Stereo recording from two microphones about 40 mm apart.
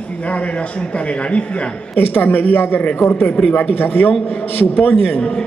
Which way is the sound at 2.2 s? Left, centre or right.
Left.